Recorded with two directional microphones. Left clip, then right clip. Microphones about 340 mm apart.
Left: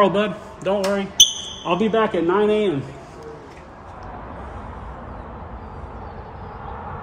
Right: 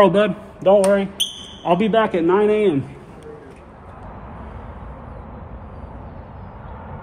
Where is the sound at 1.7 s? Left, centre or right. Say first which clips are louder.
Even; right.